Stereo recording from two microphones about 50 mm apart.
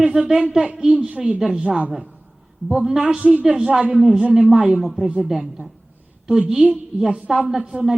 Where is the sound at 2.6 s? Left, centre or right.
Centre.